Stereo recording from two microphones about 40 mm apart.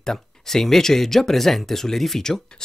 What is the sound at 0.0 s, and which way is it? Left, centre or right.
Speech, centre.